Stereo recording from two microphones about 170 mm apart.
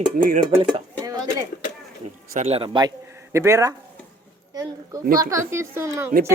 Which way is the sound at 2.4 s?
35° right (ahead or behind).